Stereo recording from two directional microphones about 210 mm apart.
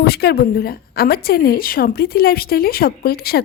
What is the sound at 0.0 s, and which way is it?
A woman's voice, 50° left (ahead or behind).